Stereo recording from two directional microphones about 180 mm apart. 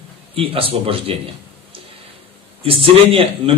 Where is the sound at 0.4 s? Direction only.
30° right (ahead or behind).